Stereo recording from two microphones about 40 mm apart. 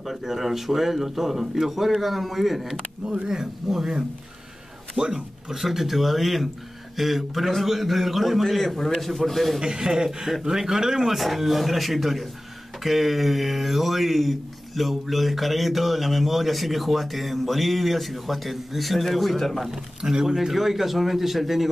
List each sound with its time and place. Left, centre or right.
0.0 s speech: centre
4.9 s a man's voice: centre
9.6 s speech: centre
20.0 s speech: centre